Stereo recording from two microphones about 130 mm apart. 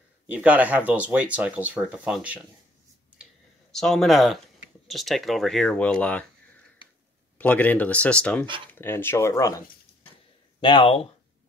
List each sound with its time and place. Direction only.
0.3 s speech: 10° right (ahead or behind)
3.7 s speech: 5° left (ahead or behind)
7.3 s speech: 10° left (ahead or behind)
10.6 s speech: 40° left (ahead or behind)